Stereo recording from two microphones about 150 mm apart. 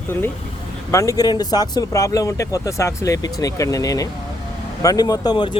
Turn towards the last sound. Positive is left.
turn(degrees=30)  # may be behind; listen again after turning